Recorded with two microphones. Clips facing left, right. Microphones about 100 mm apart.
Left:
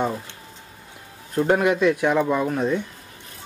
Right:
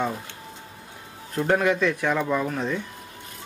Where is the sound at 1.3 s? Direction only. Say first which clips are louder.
Left 3 dB; 10° left (ahead or behind).